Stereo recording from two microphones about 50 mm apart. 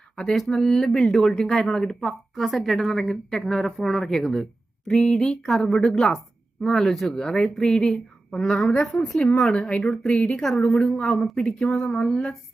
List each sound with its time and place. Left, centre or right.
0.3 s a woman's voice: centre
2.3 s a woman's voice: centre
2.9 s a woman's voice: centre
9.0 s speech: left
9.2 s a woman's voice: centre
9.5 s a woman's voice: left